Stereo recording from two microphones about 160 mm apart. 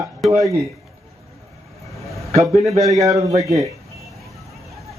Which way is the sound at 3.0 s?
20° right (ahead or behind).